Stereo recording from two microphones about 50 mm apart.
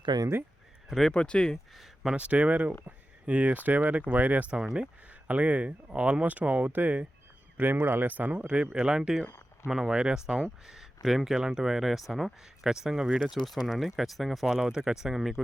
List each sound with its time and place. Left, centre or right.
0.9 s speech: centre
1.1 s speech: left
1.7 s a sound: centre
2.1 s speech: right
4.5 s speech: centre
5.0 s speech: right
8.7 s speech: centre
10.7 s speech: centre
14.4 s speech: centre